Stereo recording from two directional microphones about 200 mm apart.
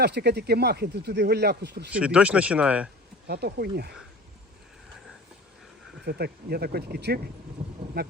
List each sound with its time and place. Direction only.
0.0 s speech: 55° right (ahead or behind)
1.9 s speech: 5° right (ahead or behind)
3.2 s speech: 55° right (ahead or behind)
6.1 s speech: 55° right (ahead or behind)
7.6 s vehicle: 30° right (ahead or behind)
8.0 s speech: 55° right (ahead or behind)